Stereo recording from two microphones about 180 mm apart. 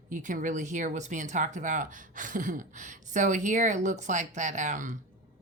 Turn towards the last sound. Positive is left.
turn(degrees=-45)  # may be behind; listen again after turning